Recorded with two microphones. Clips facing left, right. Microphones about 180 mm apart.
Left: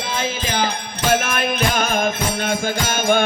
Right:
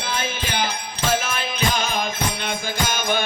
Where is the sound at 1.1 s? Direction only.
60° left (ahead or behind).